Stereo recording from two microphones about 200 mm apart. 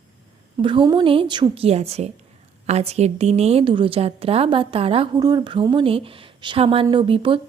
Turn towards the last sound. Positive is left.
turn(degrees=-25)  # may be behind; listen again after turning